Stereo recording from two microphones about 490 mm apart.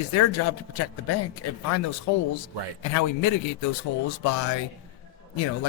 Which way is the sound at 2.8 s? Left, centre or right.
Left.